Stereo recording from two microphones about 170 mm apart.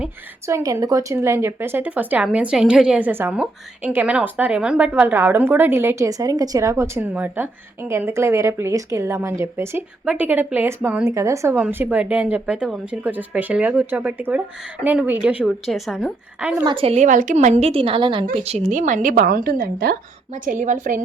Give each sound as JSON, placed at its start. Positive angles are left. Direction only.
{"t": 0.4, "sound": "a woman's voice", "side_deg": -20}
{"t": 16.6, "sound": "a woman's voice", "side_deg": -35}